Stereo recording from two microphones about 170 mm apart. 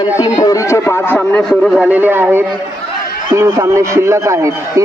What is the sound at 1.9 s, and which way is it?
A man's voice, 10° right (ahead or behind).